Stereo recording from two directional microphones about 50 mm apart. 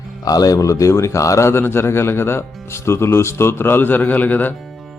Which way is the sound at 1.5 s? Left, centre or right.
Left.